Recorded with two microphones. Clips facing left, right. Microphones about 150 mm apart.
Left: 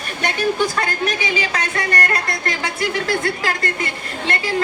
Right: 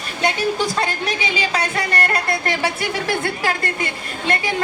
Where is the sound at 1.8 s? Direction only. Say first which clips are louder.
Even; 25° right (ahead or behind).